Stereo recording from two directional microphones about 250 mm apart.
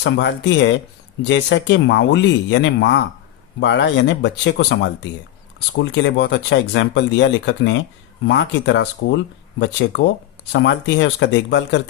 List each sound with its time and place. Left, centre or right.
0.0 s speech: left